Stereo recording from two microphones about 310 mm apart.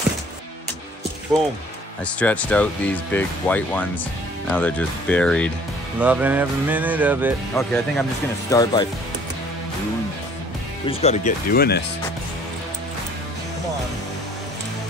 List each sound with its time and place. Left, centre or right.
2.0 s speech: centre
8.5 s speech: centre
10.9 s speech: left